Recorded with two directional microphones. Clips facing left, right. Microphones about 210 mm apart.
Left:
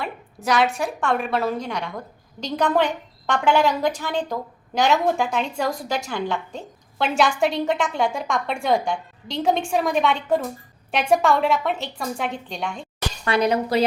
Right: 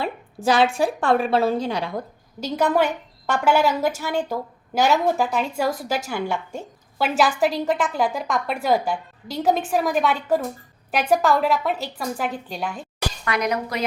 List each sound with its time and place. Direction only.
0.0 s a woman's voice: 30° right (ahead or behind)
2.4 s a woman's voice: 10° right (ahead or behind)
13.2 s speech: 30° left (ahead or behind)